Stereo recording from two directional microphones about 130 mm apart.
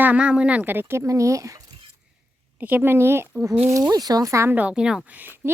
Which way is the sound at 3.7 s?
30° right (ahead or behind).